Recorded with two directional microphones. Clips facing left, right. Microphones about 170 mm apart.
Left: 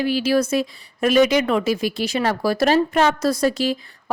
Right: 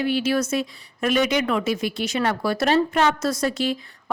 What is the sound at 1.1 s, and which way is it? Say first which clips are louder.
A woman's voice: left 5 dB; 35° left (ahead or behind).